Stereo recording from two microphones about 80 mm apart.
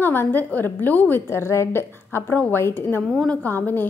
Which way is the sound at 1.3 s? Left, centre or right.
Left.